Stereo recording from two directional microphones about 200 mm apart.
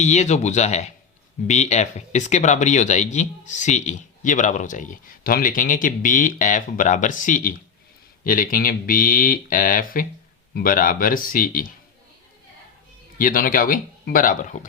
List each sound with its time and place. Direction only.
0.0 s speech: 35° left (ahead or behind)
13.1 s speech: 45° left (ahead or behind)